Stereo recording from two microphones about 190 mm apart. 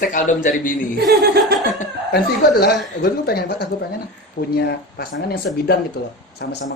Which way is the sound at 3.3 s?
55° left (ahead or behind).